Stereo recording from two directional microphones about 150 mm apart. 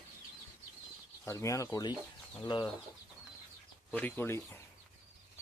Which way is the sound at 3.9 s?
10° left (ahead or behind).